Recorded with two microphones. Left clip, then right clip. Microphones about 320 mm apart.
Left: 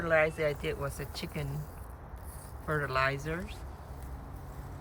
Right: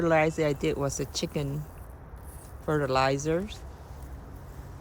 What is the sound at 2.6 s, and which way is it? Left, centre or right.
Speech, centre.